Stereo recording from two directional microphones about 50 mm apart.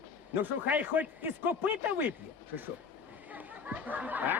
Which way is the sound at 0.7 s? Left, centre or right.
Right.